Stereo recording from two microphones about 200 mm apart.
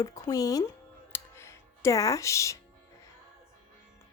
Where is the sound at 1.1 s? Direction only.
15° left (ahead or behind).